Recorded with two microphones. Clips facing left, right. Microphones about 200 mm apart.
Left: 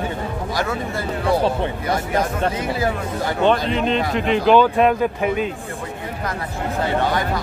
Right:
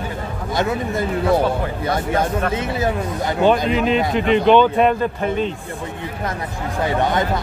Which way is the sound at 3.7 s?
5° right (ahead or behind).